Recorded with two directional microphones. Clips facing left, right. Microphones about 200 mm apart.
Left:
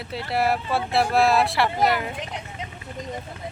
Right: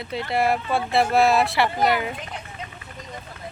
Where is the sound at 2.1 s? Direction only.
20° left (ahead or behind).